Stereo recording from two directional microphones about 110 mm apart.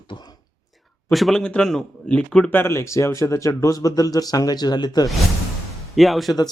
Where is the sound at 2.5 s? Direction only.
25° left (ahead or behind); by 5.1 s 40° left (ahead or behind).